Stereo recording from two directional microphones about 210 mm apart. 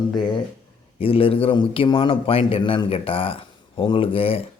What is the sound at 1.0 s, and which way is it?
A man's voice, 25° left (ahead or behind).